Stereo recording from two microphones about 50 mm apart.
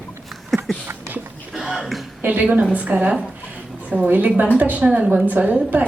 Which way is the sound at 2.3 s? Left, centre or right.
Right.